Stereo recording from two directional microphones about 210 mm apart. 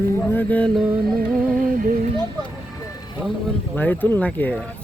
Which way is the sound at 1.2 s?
45° right (ahead or behind).